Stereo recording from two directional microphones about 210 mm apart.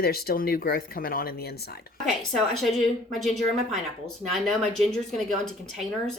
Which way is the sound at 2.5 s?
Centre (ahead or behind).